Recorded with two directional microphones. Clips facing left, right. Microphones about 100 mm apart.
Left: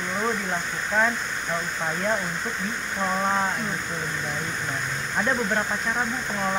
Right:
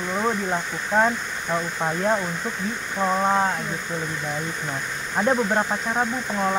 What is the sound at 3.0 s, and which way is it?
Speech, 20° right (ahead or behind).